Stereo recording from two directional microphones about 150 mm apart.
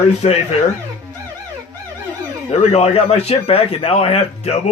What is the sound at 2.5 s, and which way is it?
A man's voice, 45° left (ahead or behind).